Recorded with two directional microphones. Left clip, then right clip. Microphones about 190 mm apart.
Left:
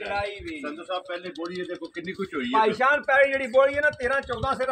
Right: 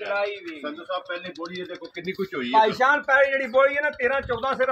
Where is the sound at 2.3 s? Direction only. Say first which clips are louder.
Right 3 dB; 50° right (ahead or behind).